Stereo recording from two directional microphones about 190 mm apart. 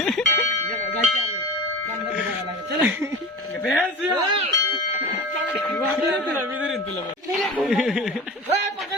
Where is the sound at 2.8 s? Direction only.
15° right (ahead or behind).